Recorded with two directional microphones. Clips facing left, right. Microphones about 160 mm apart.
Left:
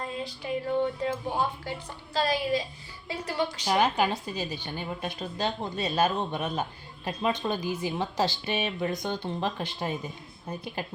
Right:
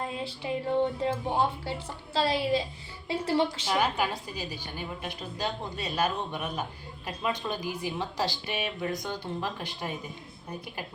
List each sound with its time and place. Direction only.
0.0 s a woman's voice: 25° right (ahead or behind)
3.7 s a woman's voice: 25° left (ahead or behind)